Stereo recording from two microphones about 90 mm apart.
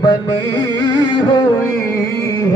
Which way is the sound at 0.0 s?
50° left (ahead or behind).